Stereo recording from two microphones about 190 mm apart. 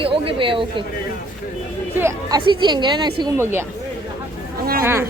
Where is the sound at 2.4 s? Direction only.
25° right (ahead or behind).